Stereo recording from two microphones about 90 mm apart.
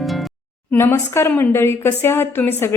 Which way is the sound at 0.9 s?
30° left (ahead or behind).